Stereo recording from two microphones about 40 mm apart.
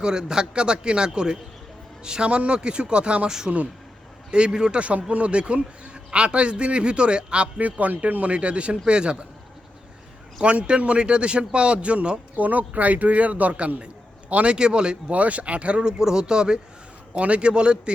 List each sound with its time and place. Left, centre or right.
0.0 s a man's voice: centre
3.2 s a man's voice: centre
4.8 s a man's voice: right
7.6 s a man's voice: right
10.4 s a man's voice: right
12.4 s a man's voice: right
15.1 s a man's voice: right; by 16.6 s centre
17.2 s a man's voice: right